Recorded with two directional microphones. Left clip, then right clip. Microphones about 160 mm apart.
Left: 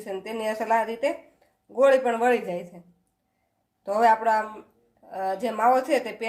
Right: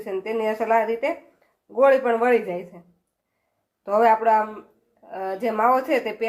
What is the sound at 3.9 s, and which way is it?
A woman's voice, 15° right (ahead or behind).